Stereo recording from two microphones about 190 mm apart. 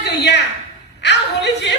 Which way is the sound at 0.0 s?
65° left (ahead or behind).